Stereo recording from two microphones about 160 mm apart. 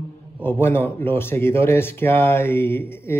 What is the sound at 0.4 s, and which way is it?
Speech, 15° left (ahead or behind).